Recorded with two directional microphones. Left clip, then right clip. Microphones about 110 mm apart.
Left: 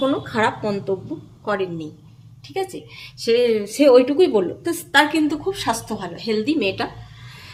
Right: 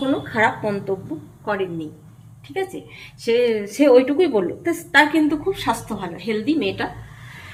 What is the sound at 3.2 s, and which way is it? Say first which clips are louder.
A woman's voice: left 1 dB; 35° left (ahead or behind).